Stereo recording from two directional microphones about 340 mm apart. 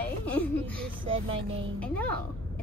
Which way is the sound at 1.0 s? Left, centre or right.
Centre.